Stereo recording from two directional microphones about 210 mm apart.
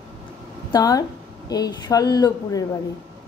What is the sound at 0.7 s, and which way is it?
A woman's voice, 15° left (ahead or behind).